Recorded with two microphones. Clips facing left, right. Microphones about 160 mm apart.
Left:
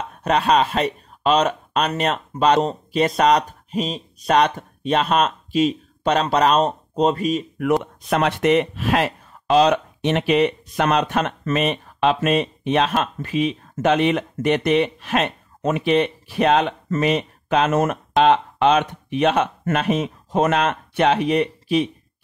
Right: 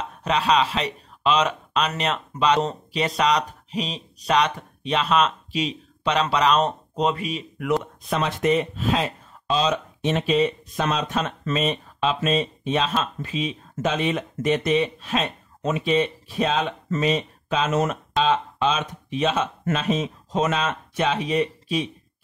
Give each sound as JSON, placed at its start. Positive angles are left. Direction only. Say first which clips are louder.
{"t": 0.2, "sound": "speech", "louder": "left 3 dB", "side_deg": 50}
{"t": 7.8, "sound": "speech", "louder": "left 5 dB", "side_deg": 65}